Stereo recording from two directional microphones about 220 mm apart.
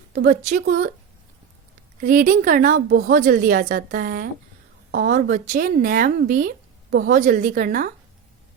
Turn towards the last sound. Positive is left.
turn(degrees=-40)  # may be behind; listen again after turning